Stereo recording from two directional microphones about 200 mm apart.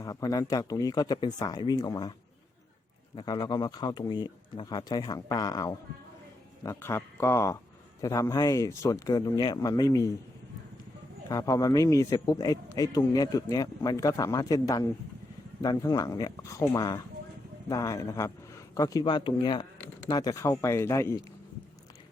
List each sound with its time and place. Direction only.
0.0 s speech: 20° left (ahead or behind)
3.2 s speech: 20° left (ahead or behind)
11.3 s a man's voice: 20° left (ahead or behind)